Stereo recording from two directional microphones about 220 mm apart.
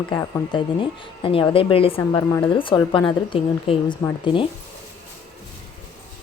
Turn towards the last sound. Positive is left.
turn(degrees=20)  # may be behind; listen again after turning